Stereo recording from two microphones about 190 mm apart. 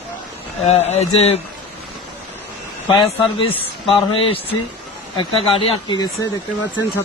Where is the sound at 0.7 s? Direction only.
35° left (ahead or behind).